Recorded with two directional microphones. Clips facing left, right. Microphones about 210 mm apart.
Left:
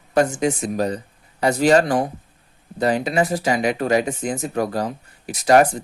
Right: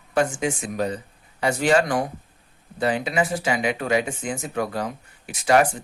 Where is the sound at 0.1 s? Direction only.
40° left (ahead or behind).